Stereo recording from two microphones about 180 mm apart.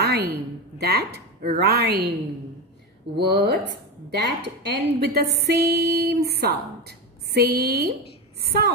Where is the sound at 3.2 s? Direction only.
65° right (ahead or behind).